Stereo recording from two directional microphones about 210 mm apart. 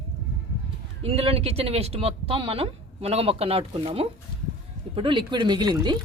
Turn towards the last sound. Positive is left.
turn(degrees=-20)  # may be behind; listen again after turning